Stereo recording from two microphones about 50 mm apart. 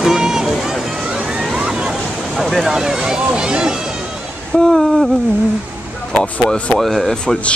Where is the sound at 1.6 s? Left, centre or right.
Right.